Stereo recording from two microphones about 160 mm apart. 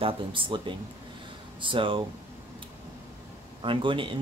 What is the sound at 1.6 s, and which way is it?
Speech, 30° right (ahead or behind).